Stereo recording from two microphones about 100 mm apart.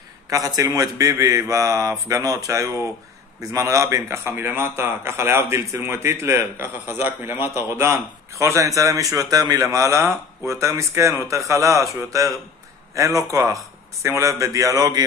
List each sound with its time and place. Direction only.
0.3 s a man's voice: 35° right (ahead or behind)